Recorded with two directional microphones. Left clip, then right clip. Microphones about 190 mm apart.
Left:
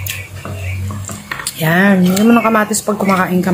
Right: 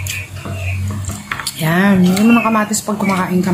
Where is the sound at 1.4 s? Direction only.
10° left (ahead or behind).